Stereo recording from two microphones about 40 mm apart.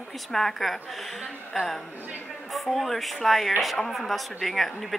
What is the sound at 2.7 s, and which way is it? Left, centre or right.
A woman's voice, centre.